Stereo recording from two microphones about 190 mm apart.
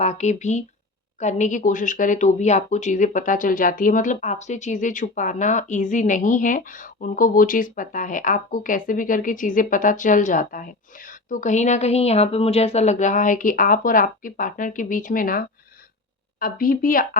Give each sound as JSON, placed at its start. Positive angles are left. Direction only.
{"t": 0.0, "sound": "speech", "side_deg": 35}